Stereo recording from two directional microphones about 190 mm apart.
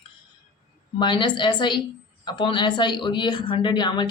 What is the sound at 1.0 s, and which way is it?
Speech, 25° left (ahead or behind).